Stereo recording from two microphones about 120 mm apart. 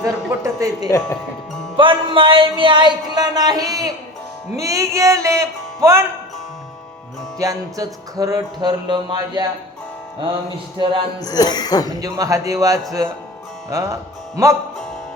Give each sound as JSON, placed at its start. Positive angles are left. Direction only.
{"t": 0.0, "sound": "music", "side_deg": -30}
{"t": 0.9, "sound": "speech", "side_deg": 25}
{"t": 1.7, "sound": "music", "side_deg": -45}
{"t": 7.3, "sound": "music", "side_deg": -30}
{"t": 11.2, "sound": "speech", "side_deg": 35}
{"t": 11.9, "sound": "music", "side_deg": -30}